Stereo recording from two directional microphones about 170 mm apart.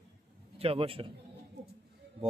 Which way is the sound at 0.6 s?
35° right (ahead or behind).